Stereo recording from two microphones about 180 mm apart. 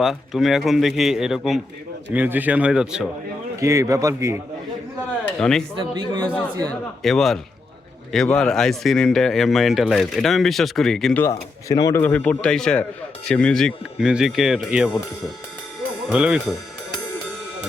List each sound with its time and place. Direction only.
0.0 s speech: centre (ahead or behind)
3.5 s speech: 15° right (ahead or behind)
5.4 s speech: 5° left (ahead or behind)
5.7 s a man's voice: 25° right (ahead or behind)
6.7 s speech: centre (ahead or behind)
16.0 s speech: 5° right (ahead or behind)